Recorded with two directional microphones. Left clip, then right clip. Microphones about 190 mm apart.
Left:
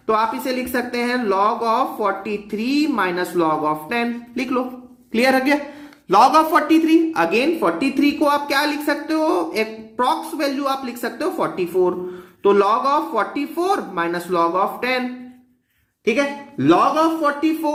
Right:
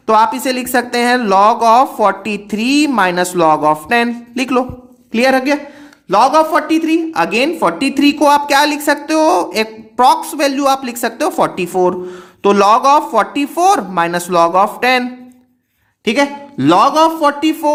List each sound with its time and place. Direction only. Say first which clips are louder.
0.0 s speech: right 8 dB; 50° right (ahead or behind)
5.1 s a woman's voice: right 4 dB; 30° right (ahead or behind)
6.1 s speech: right 3 dB; 15° right (ahead or behind); by 15.0 s 45° right (ahead or behind)
16.0 s speech: right 5 dB; 50° right (ahead or behind)